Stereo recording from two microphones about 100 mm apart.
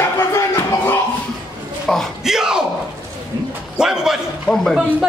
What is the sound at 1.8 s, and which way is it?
Speech, centre (ahead or behind).